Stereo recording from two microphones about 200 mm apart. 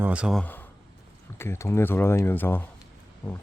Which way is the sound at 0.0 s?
5° right (ahead or behind).